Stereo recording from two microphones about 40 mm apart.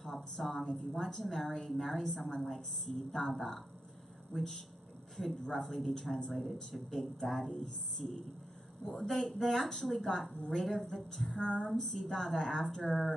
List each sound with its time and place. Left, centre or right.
0.0 s a woman's voice: centre
8.8 s a man's voice: centre
9.1 s a woman's voice: centre
11.4 s a sound: left
11.7 s a woman's voice: centre